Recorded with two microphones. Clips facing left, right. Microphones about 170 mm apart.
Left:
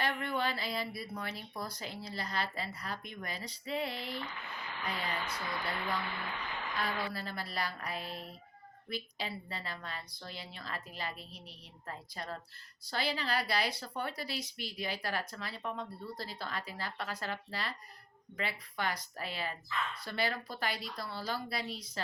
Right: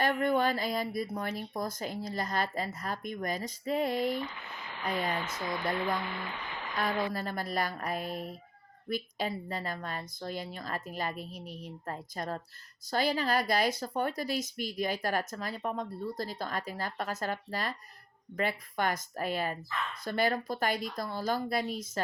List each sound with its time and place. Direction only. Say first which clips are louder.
0.0 s a woman's voice: right 7 dB; 45° right (ahead or behind)